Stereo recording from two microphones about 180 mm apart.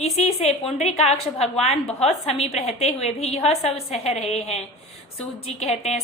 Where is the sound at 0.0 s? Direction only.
35° left (ahead or behind).